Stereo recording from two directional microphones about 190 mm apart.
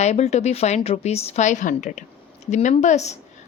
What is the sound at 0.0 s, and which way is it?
A woman's voice, 35° left (ahead or behind).